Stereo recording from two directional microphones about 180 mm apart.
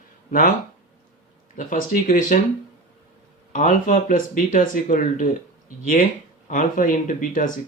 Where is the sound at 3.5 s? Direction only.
50° left (ahead or behind).